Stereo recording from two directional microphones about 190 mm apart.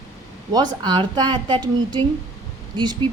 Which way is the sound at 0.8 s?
25° right (ahead or behind).